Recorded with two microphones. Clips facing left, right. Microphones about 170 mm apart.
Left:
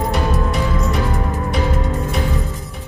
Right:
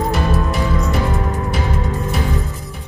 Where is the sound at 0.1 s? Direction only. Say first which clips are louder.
Even; centre (ahead or behind).